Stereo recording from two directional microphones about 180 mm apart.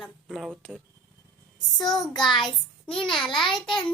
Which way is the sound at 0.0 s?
Centre (ahead or behind).